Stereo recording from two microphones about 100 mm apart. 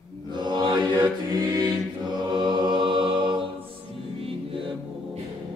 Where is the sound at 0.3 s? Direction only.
45° right (ahead or behind).